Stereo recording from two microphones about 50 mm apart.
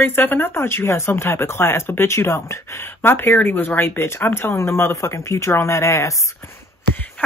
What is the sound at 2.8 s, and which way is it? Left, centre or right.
Speech, left.